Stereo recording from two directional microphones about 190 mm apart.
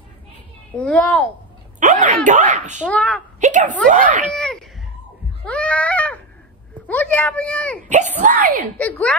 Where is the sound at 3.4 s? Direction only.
40° right (ahead or behind).